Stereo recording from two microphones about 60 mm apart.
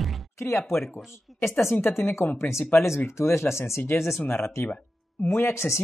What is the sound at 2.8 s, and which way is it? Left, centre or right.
Speech, left.